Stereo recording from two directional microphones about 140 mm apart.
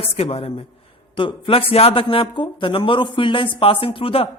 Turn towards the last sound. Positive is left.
turn(degrees=40)  # may be behind; listen again after turning